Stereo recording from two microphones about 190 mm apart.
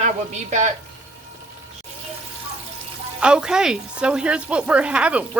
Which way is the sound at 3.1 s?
5° right (ahead or behind).